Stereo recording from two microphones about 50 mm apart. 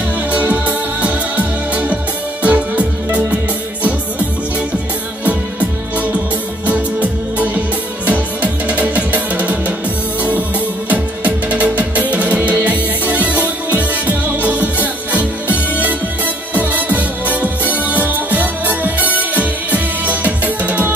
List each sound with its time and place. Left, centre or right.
0.3 s music: right
5.2 s music: right
10.9 s music: right